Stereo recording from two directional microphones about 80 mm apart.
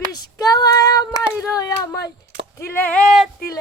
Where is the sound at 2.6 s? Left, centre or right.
Left.